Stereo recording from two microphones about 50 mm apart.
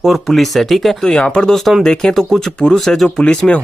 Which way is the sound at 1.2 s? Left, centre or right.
Left.